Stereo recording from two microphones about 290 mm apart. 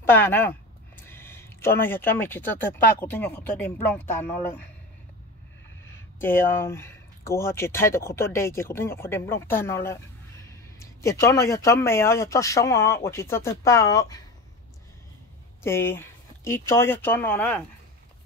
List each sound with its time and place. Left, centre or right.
0.0 s speech: centre
5.9 s speech: centre
15.6 s speech: centre